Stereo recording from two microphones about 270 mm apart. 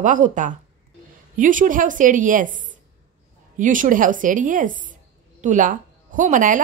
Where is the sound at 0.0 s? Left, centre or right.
Right.